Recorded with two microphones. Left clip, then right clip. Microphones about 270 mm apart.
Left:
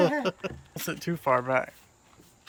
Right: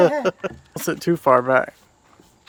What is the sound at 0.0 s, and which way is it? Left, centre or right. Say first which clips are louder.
Speech: right 8 dB; centre.